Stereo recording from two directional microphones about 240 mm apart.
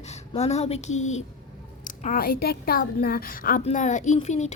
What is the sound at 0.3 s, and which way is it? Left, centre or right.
A woman's voice, left.